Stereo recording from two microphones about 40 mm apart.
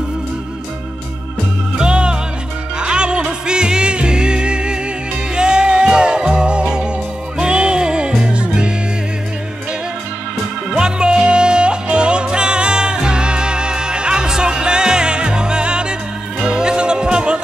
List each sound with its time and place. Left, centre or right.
1.8 s music: right
10.7 s music: right